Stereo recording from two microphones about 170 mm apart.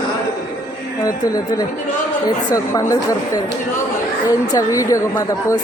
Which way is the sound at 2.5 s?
20° left (ahead or behind).